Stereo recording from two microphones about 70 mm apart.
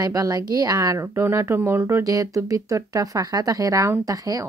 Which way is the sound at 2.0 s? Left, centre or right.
Right.